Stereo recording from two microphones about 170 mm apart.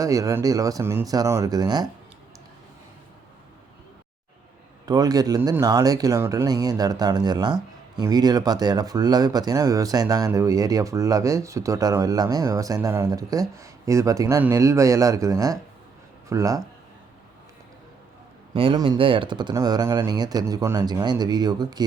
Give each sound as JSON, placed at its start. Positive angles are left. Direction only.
{"t": 0.0, "sound": "speech", "side_deg": -20}
{"t": 4.9, "sound": "speech", "side_deg": -20}
{"t": 18.5, "sound": "speech", "side_deg": -30}